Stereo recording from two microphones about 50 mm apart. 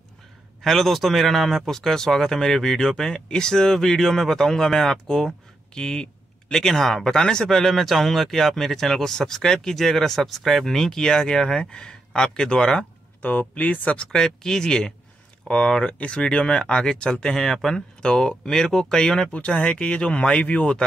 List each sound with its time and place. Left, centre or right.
0.6 s speech: centre
13.2 s speech: left
14.1 s speech: centre
19.3 s speech: left